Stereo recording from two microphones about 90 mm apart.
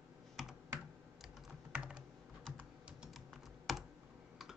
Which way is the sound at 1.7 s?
10° right (ahead or behind).